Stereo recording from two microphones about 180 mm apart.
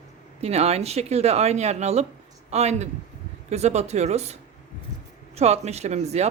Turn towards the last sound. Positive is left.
turn(degrees=-35)  # may be behind; listen again after turning